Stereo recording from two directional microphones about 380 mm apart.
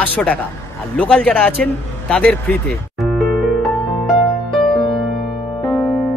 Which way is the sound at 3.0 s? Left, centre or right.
Centre.